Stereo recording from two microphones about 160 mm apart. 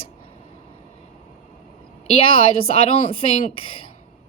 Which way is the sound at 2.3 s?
35° left (ahead or behind).